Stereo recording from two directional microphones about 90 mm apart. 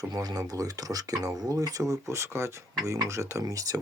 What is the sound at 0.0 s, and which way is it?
Speech, 45° right (ahead or behind).